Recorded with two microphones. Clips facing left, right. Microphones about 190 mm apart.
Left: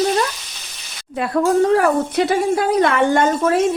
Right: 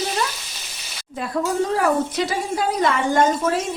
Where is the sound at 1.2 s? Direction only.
65° left (ahead or behind).